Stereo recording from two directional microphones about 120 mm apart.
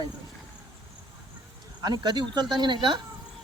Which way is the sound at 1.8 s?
35° right (ahead or behind).